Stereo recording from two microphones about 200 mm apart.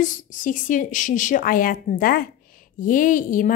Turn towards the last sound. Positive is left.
turn(degrees=40)  # may be behind; listen again after turning